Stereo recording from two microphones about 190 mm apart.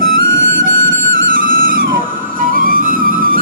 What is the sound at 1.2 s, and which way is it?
Music, 45° right (ahead or behind).